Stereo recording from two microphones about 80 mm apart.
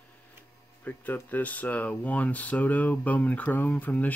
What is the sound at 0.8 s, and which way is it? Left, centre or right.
Speech, left.